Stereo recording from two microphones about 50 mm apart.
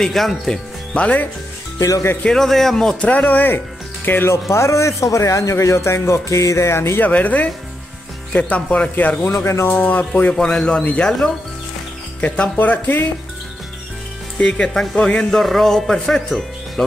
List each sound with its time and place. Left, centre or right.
0.0 s a man's voice: centre
0.9 s speech: left
1.8 s speech: left
2.2 s a man's voice: centre
3.0 s speech: left
4.3 s speech: left
7.0 s speech: left
9.2 s speech: left
9.5 s speech: left
9.8 s speech: left
10.4 s a man's voice: centre
12.2 s speech: left
15.0 s a man's voice: centre
15.4 s speech: centre